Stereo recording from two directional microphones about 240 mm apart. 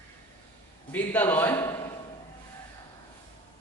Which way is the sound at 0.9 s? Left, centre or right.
Centre.